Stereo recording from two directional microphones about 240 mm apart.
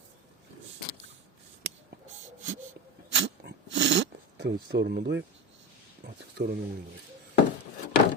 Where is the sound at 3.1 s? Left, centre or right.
Right.